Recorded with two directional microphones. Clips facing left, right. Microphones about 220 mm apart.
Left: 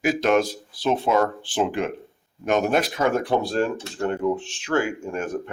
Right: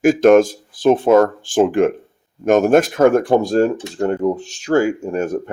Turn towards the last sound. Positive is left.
turn(degrees=-40)  # may be behind; listen again after turning